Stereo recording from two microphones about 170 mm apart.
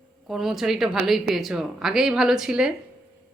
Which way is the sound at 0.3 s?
Centre (ahead or behind).